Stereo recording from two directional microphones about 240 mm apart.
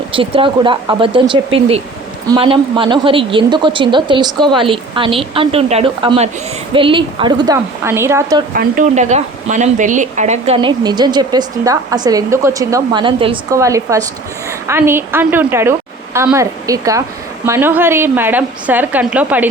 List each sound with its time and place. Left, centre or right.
0.1 s a woman's voice: right
8.5 s a woman's voice: right; by 19.5 s centre